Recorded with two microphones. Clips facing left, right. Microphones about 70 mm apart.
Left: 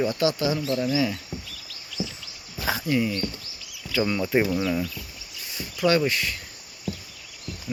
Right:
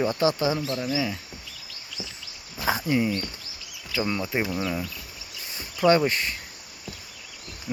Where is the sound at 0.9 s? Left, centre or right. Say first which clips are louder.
Left 2 dB; centre.